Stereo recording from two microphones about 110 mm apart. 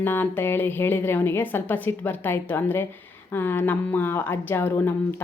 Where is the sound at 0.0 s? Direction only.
20° left (ahead or behind).